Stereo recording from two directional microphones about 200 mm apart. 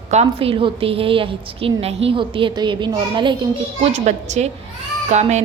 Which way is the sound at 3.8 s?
35° right (ahead or behind).